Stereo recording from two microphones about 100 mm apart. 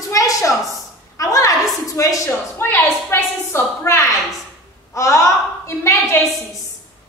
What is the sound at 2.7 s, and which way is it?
A woman's voice, 25° left (ahead or behind).